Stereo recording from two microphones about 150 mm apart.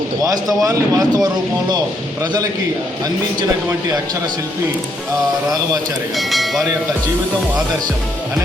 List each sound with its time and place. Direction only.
0.6 s speech: 25° right (ahead or behind)
6.1 s speech: centre (ahead or behind)